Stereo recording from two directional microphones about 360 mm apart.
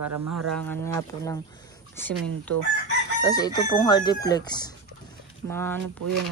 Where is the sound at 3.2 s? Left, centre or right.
Centre.